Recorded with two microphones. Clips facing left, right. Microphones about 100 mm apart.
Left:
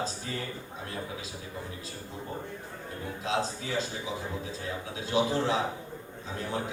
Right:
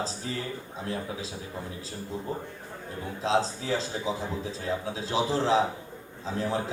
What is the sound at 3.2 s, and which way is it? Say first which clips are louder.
A man's voice: right 5 dB; 30° right (ahead or behind).